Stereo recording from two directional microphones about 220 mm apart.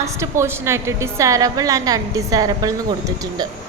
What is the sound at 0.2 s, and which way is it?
A woman's voice, 10° right (ahead or behind).